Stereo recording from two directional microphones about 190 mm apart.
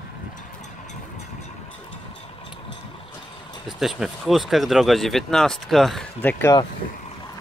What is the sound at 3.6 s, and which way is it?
Speech, centre (ahead or behind).